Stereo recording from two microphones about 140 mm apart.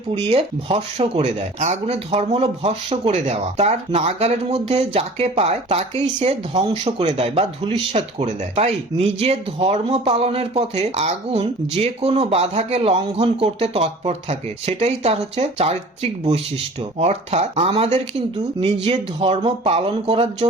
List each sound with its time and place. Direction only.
0.3 s speech: 45° right (ahead or behind)
17.0 s speech: 50° right (ahead or behind)